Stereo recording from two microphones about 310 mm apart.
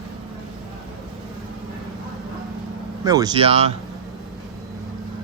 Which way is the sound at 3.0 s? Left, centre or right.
Centre.